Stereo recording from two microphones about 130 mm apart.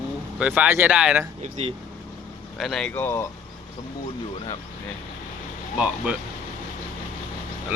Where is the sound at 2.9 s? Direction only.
15° left (ahead or behind).